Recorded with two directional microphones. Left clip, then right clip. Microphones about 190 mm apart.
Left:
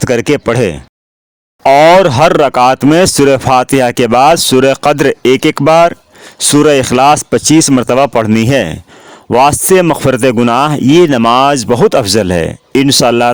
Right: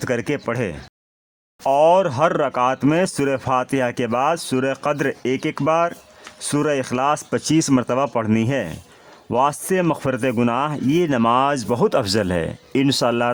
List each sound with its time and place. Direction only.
0.0 s speech: 35° left (ahead or behind)